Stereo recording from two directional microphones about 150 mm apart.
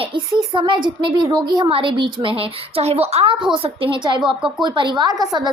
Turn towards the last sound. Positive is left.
turn(degrees=-25)  # may be behind; listen again after turning